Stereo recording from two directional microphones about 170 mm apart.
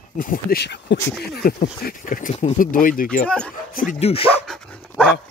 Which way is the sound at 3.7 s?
55° left (ahead or behind).